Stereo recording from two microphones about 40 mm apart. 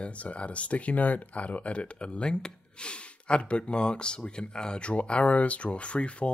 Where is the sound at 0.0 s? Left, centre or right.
Left.